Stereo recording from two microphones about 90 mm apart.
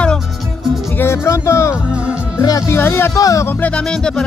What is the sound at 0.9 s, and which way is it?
Music, 30° left (ahead or behind).